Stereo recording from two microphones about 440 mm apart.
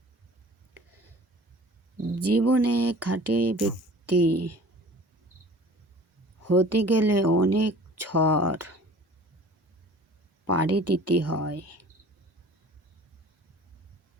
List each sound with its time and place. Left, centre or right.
2.1 s speech: right
6.4 s speech: right
10.4 s speech: right